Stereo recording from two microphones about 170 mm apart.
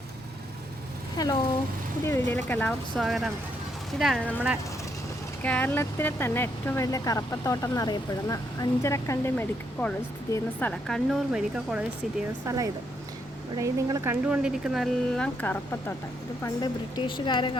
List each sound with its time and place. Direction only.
1.1 s speech: 25° left (ahead or behind)
2.9 s speech: centre (ahead or behind)
5.4 s speech: 10° left (ahead or behind)
12.5 s speech: 20° right (ahead or behind); by 16.0 s 10° left (ahead or behind)
16.4 s a woman's voice: 25° left (ahead or behind)